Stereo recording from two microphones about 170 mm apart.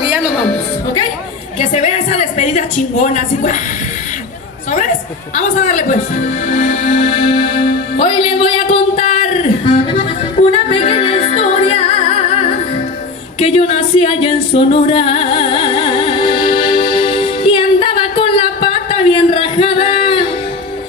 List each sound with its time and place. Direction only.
1.6 s a sound: 40° left (ahead or behind)
5.3 s speech: 45° left (ahead or behind)
10.5 s music: 35° left (ahead or behind)
19.1 s singing: 35° left (ahead or behind)